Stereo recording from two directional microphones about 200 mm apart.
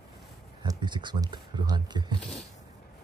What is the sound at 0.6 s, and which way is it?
Speech, 20° right (ahead or behind).